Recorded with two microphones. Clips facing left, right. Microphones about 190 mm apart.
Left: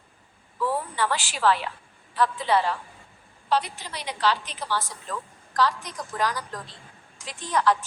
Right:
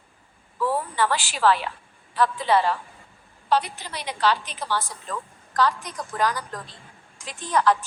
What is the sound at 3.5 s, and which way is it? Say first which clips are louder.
A woman's voice: right 2 dB; 55° right (ahead or behind).